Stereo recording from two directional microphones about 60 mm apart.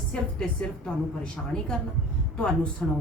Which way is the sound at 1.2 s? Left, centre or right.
Centre.